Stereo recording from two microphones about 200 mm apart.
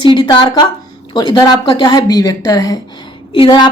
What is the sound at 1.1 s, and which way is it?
A woman's voice, 20° left (ahead or behind).